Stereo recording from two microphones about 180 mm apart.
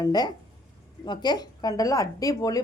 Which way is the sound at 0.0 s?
20° left (ahead or behind).